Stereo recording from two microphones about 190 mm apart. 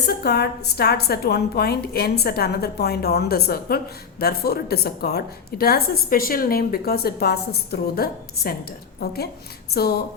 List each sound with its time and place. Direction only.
0.2 s a woman's voice: 55° left (ahead or behind)